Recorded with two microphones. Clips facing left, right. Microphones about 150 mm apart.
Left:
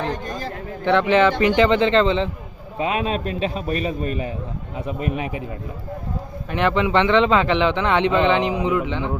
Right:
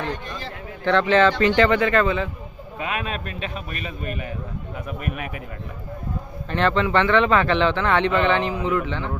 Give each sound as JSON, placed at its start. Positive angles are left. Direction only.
{"t": 0.1, "sound": "speech", "side_deg": 45}
{"t": 0.9, "sound": "a man's voice", "side_deg": 15}
{"t": 6.5, "sound": "a man's voice", "side_deg": 15}